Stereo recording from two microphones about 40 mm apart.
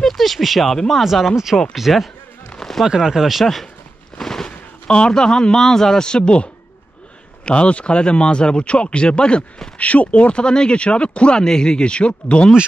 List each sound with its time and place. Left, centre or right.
0.0 s speech: centre
4.2 s a sound: centre
4.5 s a sound: left
5.2 s speech: centre
6.0 s speech: left
9.8 s speech: left
11.3 s speech: centre